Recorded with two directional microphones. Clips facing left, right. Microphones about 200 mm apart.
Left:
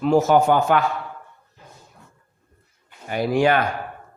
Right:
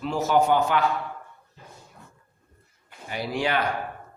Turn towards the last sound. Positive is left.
turn(degrees=50)  # may be behind; listen again after turning